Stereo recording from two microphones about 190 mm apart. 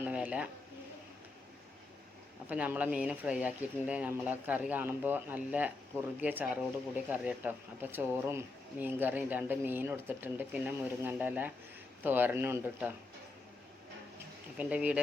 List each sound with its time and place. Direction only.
0.0 s a sound: 5° right (ahead or behind)
2.5 s speech: 10° right (ahead or behind)
14.6 s speech: 5° right (ahead or behind)